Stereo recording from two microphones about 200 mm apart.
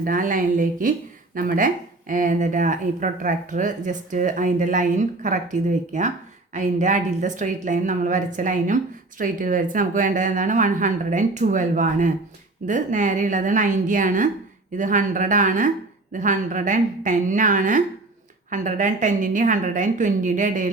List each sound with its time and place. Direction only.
0.0 s a woman's voice: 45° right (ahead or behind)